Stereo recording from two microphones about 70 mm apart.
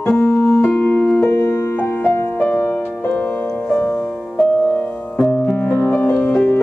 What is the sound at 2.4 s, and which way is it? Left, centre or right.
Music, left.